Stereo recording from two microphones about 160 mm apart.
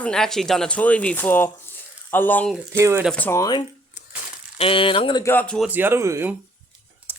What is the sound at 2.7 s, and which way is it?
Speech, 15° right (ahead or behind).